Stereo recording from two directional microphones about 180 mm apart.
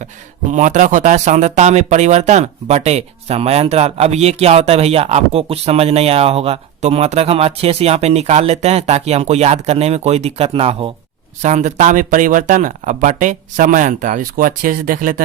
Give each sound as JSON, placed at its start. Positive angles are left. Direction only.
{"t": 0.5, "sound": "speech", "side_deg": -45}
{"t": 11.4, "sound": "speech", "side_deg": -45}